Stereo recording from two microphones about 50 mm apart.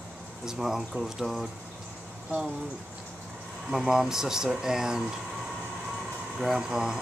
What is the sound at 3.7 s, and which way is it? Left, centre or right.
Speech, centre.